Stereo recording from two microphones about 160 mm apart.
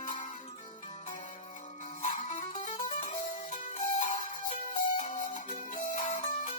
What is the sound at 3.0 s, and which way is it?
Music, 50° left (ahead or behind).